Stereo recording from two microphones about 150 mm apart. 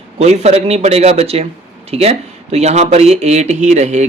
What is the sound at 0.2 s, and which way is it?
Speech, 45° right (ahead or behind).